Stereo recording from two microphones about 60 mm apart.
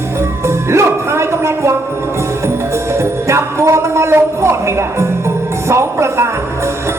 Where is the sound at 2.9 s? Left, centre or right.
Right.